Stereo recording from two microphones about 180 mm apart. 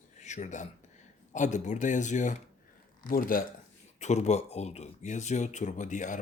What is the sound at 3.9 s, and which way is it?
Speech, 40° left (ahead or behind).